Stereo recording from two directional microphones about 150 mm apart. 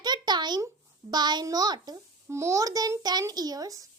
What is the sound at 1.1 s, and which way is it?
A child's voice, 30° right (ahead or behind).